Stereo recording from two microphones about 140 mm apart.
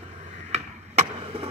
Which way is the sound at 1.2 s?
40° right (ahead or behind).